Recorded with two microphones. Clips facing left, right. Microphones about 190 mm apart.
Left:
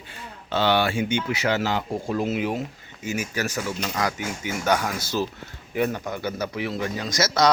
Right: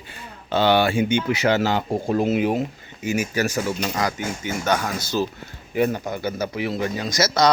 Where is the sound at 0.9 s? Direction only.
15° right (ahead or behind); by 2.6 s 35° right (ahead or behind).